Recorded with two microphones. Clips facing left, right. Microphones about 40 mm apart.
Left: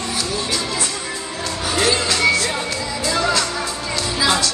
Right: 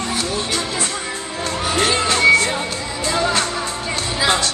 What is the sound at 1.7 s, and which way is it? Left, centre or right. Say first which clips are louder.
Music: even; right.